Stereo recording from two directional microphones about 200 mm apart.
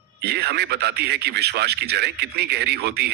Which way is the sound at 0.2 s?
55° right (ahead or behind).